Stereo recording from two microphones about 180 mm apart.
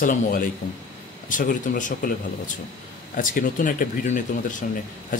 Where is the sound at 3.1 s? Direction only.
50° left (ahead or behind).